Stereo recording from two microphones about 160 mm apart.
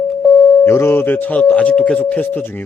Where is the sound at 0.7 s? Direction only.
15° left (ahead or behind).